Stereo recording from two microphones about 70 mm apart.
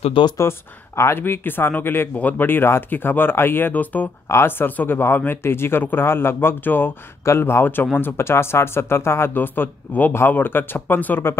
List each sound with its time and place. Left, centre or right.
0.4 s speech: left
4.3 s speech: left
8.2 s speech: left